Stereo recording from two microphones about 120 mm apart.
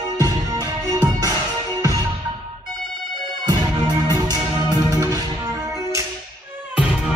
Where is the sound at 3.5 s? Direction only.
40° right (ahead or behind).